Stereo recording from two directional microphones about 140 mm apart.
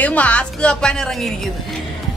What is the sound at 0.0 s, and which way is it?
A woman's voice, 10° left (ahead or behind).